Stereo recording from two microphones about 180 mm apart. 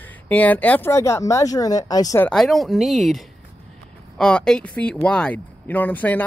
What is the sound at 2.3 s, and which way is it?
Speech, centre (ahead or behind).